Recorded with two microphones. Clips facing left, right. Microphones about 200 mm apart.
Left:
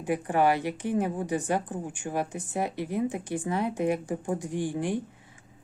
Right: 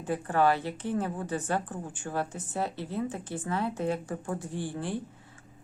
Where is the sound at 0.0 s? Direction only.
15° left (ahead or behind).